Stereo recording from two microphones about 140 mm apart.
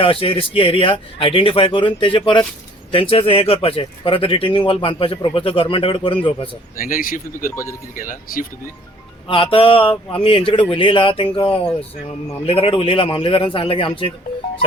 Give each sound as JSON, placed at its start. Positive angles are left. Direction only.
{"t": 0.0, "sound": "speech", "side_deg": 40}
{"t": 6.7, "sound": "speech", "side_deg": 80}
{"t": 7.5, "sound": "speech", "side_deg": 20}
{"t": 7.9, "sound": "speech", "side_deg": 70}
{"t": 9.2, "sound": "speech", "side_deg": 40}